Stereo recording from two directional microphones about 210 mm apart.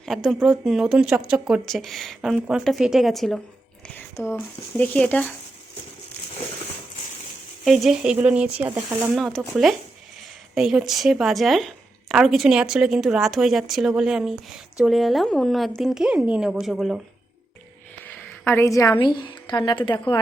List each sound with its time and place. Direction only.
0.0 s a woman's voice: centre (ahead or behind)
7.6 s a woman's voice: centre (ahead or behind)
9.1 s a woman's voice: centre (ahead or behind)
18.0 s a woman's voice: 10° left (ahead or behind)